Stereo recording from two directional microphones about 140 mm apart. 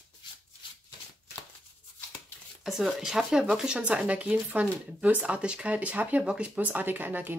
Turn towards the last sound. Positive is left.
turn(degrees=-15)  # may be behind; listen again after turning